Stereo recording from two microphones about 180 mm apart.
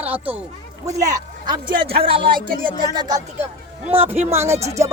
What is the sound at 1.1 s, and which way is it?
Speech, 25° right (ahead or behind).